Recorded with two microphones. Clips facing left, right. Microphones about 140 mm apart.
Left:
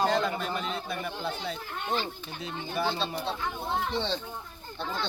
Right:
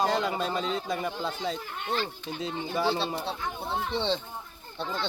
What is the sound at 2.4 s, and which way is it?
Speech, 30° right (ahead or behind).